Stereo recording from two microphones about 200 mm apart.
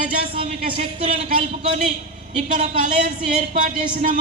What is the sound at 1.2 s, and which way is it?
Speech, 40° right (ahead or behind).